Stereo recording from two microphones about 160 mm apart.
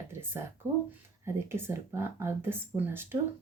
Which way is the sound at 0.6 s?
15° left (ahead or behind).